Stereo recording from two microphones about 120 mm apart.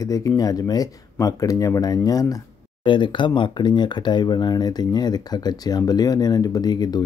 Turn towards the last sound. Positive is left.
turn(degrees=35)  # may be behind; listen again after turning